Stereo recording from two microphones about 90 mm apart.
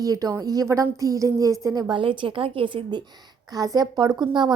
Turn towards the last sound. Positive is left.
turn(degrees=-55)  # may be behind; listen again after turning